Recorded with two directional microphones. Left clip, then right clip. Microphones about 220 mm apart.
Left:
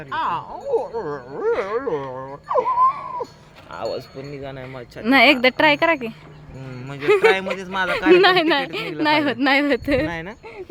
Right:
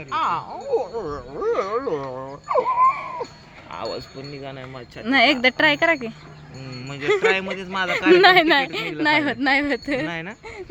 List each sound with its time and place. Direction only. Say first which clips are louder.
0.1 s speech: right 1 dB; 5° left (ahead or behind)
0.7 s speech: left 1 dB; 20° left (ahead or behind)
1.0 s speech: left 2 dB; 30° left (ahead or behind)
1.5 s speech: even; 10° left (ahead or behind)
2.0 s sheep: left 1 dB; 5° left (ahead or behind)
3.7 s speech: left 2 dB; 15° left (ahead or behind)
8.1 s speech: right 1 dB; centre (ahead or behind)